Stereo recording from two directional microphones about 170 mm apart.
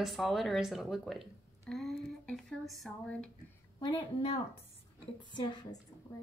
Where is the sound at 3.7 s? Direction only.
25° left (ahead or behind).